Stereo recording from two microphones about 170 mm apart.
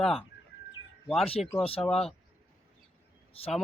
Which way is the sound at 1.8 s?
Centre (ahead or behind).